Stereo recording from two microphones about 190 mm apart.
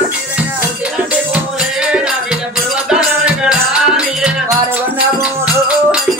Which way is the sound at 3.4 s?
5° right (ahead or behind).